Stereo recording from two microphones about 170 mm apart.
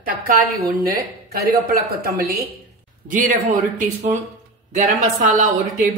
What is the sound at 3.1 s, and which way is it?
Speech, 50° right (ahead or behind).